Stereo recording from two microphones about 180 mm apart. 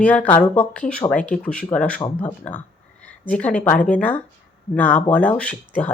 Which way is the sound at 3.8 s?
45° left (ahead or behind).